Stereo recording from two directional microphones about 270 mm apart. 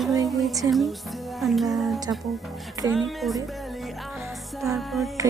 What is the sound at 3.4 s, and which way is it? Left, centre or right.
Music, centre.